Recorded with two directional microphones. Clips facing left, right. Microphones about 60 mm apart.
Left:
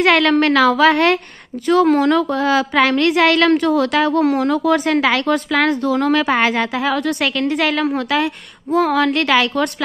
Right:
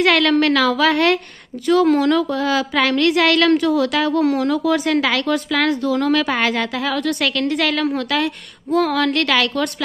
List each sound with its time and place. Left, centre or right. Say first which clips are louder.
0.0 s a woman's voice: left 2 dB; left